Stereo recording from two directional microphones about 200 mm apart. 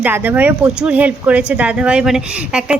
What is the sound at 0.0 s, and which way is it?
Speech, 10° right (ahead or behind).